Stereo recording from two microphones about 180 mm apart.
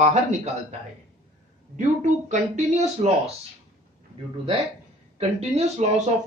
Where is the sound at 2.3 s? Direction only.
40° right (ahead or behind).